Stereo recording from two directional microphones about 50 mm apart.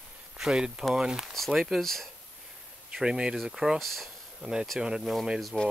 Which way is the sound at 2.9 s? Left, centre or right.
Centre.